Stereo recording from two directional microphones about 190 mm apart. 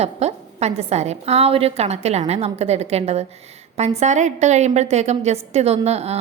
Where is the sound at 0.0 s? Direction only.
35° right (ahead or behind).